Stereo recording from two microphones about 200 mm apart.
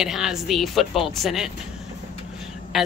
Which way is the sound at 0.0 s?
Centre (ahead or behind).